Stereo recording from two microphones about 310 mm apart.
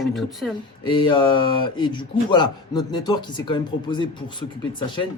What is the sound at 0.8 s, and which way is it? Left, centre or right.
Speech, centre.